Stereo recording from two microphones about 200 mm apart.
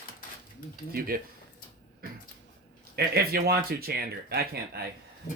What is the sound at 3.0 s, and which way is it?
Speech, 50° right (ahead or behind).